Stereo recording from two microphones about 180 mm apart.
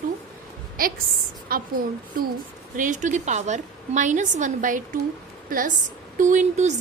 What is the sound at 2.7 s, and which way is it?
A woman's voice, 45° right (ahead or behind).